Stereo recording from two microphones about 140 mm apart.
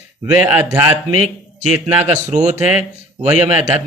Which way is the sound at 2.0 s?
55° right (ahead or behind).